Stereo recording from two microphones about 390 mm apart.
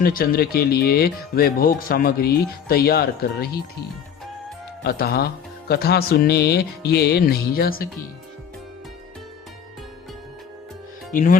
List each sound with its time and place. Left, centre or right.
0.0 s speech: left
4.8 s speech: left
11.1 s speech: left